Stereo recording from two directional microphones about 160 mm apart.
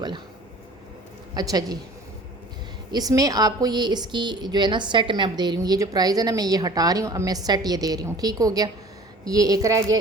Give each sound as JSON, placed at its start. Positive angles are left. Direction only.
{"t": 1.3, "sound": "a woman's voice", "side_deg": -25}
{"t": 2.9, "sound": "a woman's voice", "side_deg": -25}